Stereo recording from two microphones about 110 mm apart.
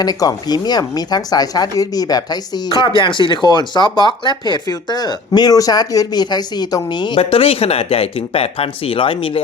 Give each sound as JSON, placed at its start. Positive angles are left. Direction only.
{"t": 0.0, "sound": "speech", "side_deg": 35}
{"t": 7.2, "sound": "speech", "side_deg": 60}